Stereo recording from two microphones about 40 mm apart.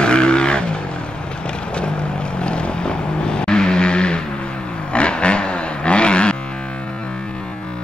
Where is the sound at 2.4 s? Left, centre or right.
Left.